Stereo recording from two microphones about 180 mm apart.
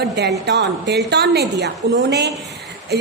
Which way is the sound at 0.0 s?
70° right (ahead or behind).